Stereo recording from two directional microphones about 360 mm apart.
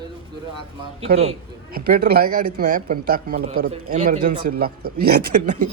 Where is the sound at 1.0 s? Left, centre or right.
Centre.